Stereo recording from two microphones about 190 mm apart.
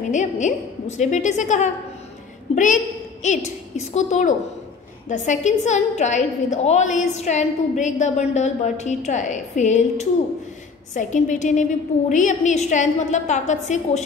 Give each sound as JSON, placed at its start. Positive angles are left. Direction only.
{"t": 0.1, "sound": "a woman's voice", "side_deg": 40}